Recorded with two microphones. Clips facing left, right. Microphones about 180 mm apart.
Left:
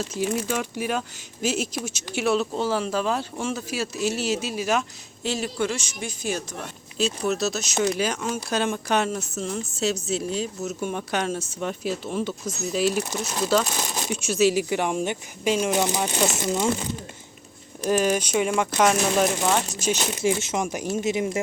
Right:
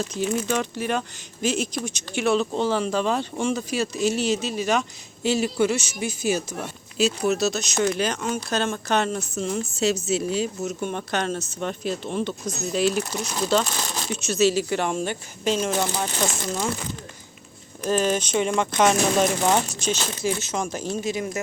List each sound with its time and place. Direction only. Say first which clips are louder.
0.1 s speech: right 1 dB; 10° left (ahead or behind)
17.8 s speech: left 1 dB; 10° left (ahead or behind)
19.8 s speech: left 2 dB; 15° left (ahead or behind)